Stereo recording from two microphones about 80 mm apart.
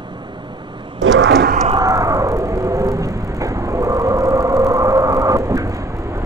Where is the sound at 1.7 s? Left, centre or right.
Right.